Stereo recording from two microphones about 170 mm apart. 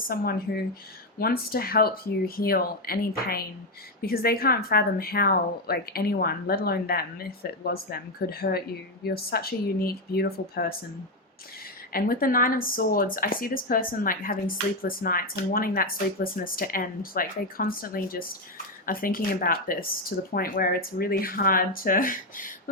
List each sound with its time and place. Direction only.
0.1 s speech: 60° left (ahead or behind)
11.9 s speech: 60° left (ahead or behind)